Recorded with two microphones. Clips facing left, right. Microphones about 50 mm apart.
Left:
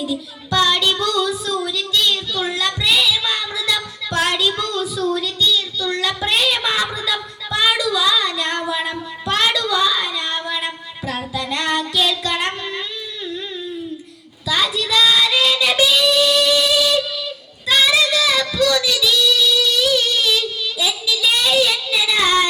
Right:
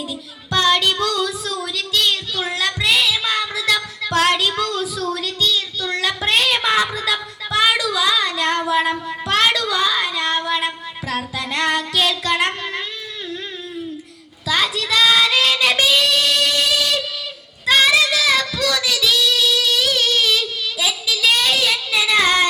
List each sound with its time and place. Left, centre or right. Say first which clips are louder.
0.5 s child singing: even; right
5.1 s a sound: left 2 dB; right
6.9 s female singing: right 1 dB; right
14.4 s child singing: even; right
16.0 s music: left 2 dB; right
17.7 s child singing: right 1 dB; right